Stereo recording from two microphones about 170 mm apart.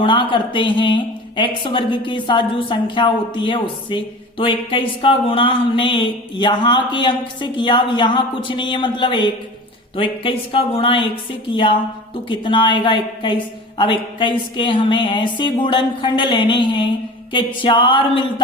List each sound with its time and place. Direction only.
0.0 s a woman's voice: 30° left (ahead or behind)